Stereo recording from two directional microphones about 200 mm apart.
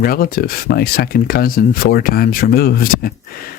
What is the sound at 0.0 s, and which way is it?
Speech, 45° left (ahead or behind).